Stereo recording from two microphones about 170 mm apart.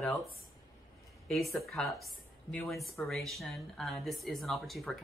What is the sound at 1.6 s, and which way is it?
Speech, centre (ahead or behind).